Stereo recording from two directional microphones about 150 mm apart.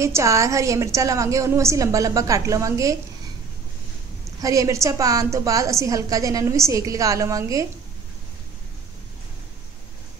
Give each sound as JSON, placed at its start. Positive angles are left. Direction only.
{"t": 0.0, "sound": "a woman's voice", "side_deg": -20}
{"t": 4.4, "sound": "a woman's voice", "side_deg": -20}